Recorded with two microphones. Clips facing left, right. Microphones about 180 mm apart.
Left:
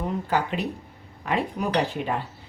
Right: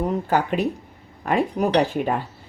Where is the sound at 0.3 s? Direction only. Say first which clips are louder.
Right 3 dB; 50° right (ahead or behind).